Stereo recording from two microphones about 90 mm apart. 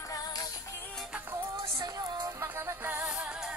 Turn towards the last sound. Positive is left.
turn(degrees=-25)  # may be behind; listen again after turning